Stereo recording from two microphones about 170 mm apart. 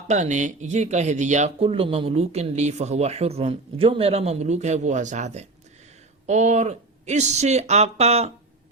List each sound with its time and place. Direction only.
0.1 s speech: 45° right (ahead or behind)